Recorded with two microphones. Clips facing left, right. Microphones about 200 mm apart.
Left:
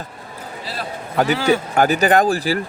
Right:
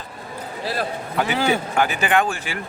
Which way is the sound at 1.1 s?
40° left (ahead or behind).